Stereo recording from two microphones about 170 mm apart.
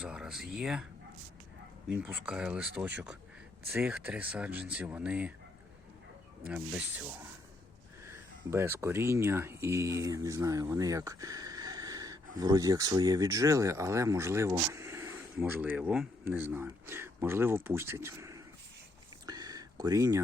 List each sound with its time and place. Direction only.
0.0 s speech: 5° right (ahead or behind)
1.9 s speech: 5° right (ahead or behind)
6.4 s speech: 10° right (ahead or behind)
19.2 s a sound: 20° right (ahead or behind)